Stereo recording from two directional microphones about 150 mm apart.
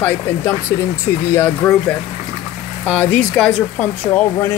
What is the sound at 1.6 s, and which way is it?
Speech, 5° left (ahead or behind).